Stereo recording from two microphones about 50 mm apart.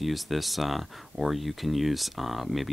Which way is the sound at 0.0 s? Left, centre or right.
Centre.